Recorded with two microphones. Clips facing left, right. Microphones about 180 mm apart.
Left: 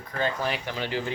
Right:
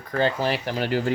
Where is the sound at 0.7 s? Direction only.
45° right (ahead or behind).